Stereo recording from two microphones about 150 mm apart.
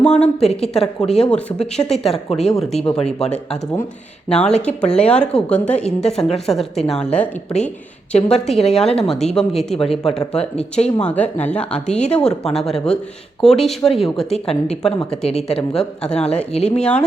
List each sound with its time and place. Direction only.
0.0 s a woman's voice: 5° left (ahead or behind)
2.8 s speech: 40° left (ahead or behind)
4.3 s a woman's voice: 5° left (ahead or behind)
9.7 s speech: 40° left (ahead or behind)
10.2 s a woman's voice: 5° left (ahead or behind)